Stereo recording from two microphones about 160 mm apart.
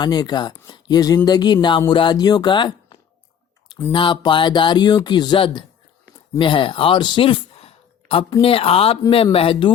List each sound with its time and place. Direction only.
0.0 s speech: 25° left (ahead or behind)